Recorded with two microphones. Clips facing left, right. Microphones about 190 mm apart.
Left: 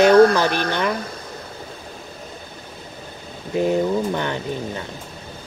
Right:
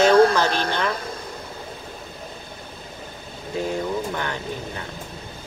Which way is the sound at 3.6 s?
20° left (ahead or behind).